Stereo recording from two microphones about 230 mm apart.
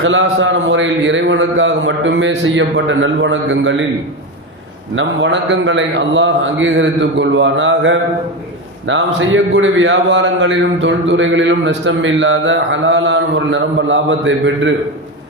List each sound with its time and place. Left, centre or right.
0.0 s a man's voice: right
4.9 s a man's voice: right